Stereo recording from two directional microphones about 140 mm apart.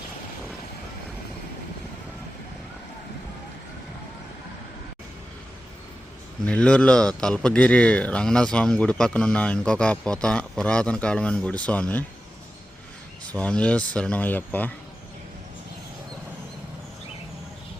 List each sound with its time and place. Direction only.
6.4 s speech: 5° left (ahead or behind)
13.2 s speech: 10° left (ahead or behind)